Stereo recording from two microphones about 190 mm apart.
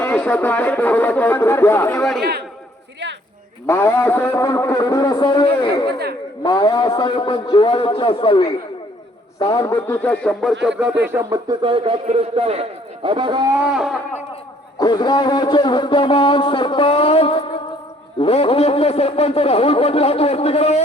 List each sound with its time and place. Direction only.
0.0 s a man's voice: 5° left (ahead or behind)
3.7 s a man's voice: 10° left (ahead or behind); by 10.9 s 5° right (ahead or behind)
11.1 s a man's voice: 15° right (ahead or behind)
13.7 s speech: centre (ahead or behind)
14.8 s a man's voice: 25° left (ahead or behind)